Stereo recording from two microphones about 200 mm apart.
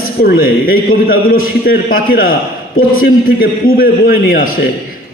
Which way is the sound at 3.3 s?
45° left (ahead or behind).